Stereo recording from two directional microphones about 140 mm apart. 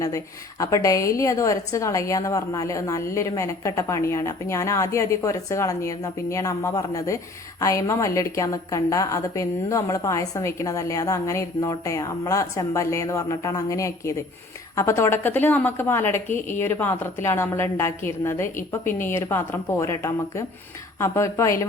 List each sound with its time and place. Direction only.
0.6 s a woman's voice: 25° left (ahead or behind)